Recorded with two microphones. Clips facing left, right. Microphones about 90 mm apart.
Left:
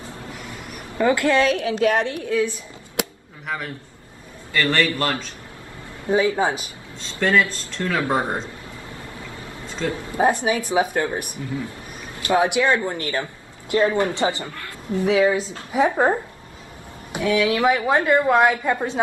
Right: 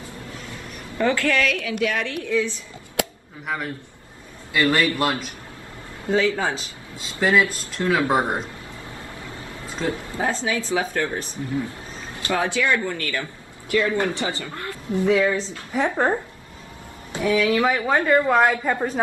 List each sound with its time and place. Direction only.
0.9 s speech: 20° left (ahead or behind)
2.0 s speech: 15° left (ahead or behind)
3.4 s a woman's voice: centre (ahead or behind)
6.0 s speech: 20° left (ahead or behind)
7.0 s a man's voice: 10° right (ahead or behind)
10.1 s speech: 20° left (ahead or behind)
14.5 s a woman's voice: 25° right (ahead or behind)
15.2 s speech: 5° left (ahead or behind)
17.3 s speech: 15° left (ahead or behind)
18.3 s a woman's voice: 5° left (ahead or behind)